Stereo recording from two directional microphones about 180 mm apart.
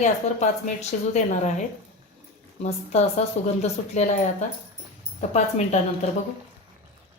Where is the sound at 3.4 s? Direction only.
40° left (ahead or behind).